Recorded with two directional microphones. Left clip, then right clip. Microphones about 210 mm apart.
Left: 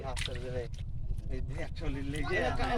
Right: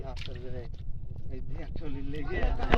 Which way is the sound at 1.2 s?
30° left (ahead or behind).